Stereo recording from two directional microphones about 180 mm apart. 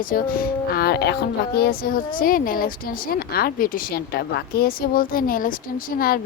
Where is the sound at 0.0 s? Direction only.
50° left (ahead or behind).